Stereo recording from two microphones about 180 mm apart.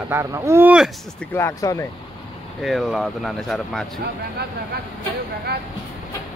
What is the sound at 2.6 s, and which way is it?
Speech, centre (ahead or behind).